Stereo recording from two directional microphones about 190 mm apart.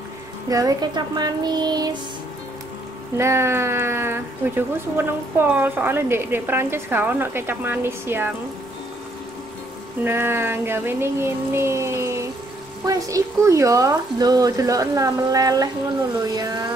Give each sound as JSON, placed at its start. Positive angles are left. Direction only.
{"t": 0.5, "sound": "speech", "side_deg": -20}
{"t": 3.2, "sound": "speech", "side_deg": -15}
{"t": 10.0, "sound": "speech", "side_deg": -10}